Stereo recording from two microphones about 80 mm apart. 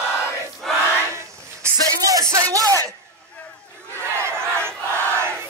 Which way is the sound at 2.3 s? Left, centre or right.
Right.